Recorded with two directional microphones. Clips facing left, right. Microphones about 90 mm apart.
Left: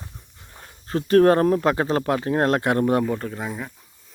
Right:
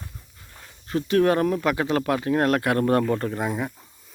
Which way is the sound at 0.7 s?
40° left (ahead or behind).